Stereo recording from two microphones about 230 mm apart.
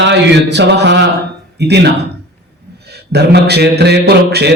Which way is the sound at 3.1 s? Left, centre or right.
Right.